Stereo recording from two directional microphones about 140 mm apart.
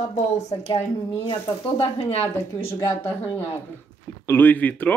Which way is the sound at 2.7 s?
15° left (ahead or behind).